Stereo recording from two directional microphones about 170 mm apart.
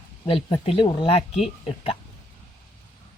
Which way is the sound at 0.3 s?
35° left (ahead or behind).